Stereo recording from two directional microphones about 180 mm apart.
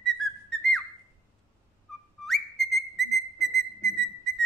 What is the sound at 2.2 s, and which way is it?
Whistle, centre (ahead or behind).